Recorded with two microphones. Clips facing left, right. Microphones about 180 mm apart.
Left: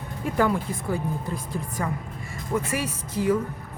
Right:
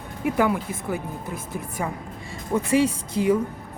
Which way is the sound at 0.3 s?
10° right (ahead or behind).